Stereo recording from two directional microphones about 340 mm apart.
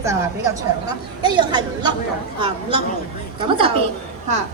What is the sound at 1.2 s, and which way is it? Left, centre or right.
Speech, centre.